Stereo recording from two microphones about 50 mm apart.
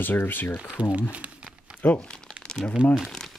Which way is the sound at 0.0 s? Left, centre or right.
Left.